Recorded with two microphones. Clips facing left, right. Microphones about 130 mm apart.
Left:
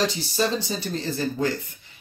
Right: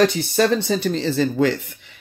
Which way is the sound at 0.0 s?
60° right (ahead or behind).